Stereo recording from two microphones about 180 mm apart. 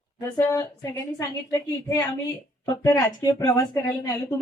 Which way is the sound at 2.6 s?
20° left (ahead or behind).